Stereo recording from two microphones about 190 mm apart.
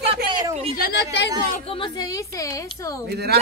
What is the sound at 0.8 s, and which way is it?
Speech, 60° left (ahead or behind).